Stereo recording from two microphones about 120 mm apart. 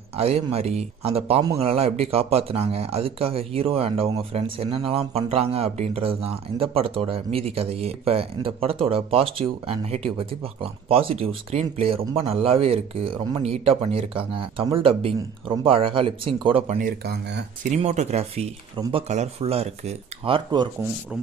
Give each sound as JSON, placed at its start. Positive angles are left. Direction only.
{"t": 0.1, "sound": "a man's voice", "side_deg": -55}
{"t": 17.6, "sound": "a man's voice", "side_deg": -70}
{"t": 20.2, "sound": "speech", "side_deg": -45}